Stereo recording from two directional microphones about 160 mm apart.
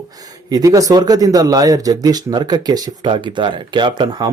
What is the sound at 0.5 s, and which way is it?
A man's voice, 20° right (ahead or behind).